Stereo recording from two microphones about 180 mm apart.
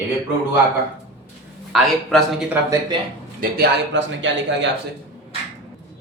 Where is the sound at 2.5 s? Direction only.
15° right (ahead or behind).